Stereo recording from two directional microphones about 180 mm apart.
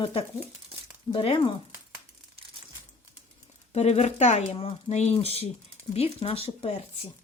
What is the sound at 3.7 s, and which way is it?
A woman's voice, 35° left (ahead or behind).